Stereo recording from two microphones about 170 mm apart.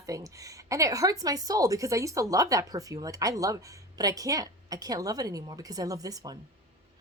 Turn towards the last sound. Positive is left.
turn(degrees=-20)  # may be behind; listen again after turning